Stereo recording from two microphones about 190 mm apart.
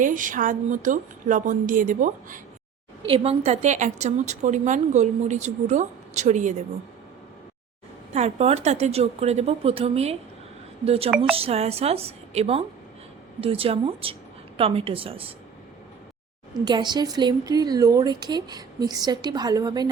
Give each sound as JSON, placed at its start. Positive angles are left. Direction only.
{"t": 0.0, "sound": "a woman's voice", "side_deg": -45}
{"t": 3.1, "sound": "a woman's voice", "side_deg": -35}
{"t": 8.1, "sound": "a woman's voice", "side_deg": -35}
{"t": 16.6, "sound": "a woman's voice", "side_deg": -20}